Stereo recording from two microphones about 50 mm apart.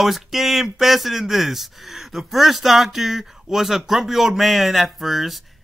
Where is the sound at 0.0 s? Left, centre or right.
Centre.